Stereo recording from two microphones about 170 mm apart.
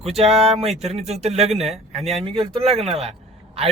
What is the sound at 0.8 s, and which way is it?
Speech, 40° right (ahead or behind).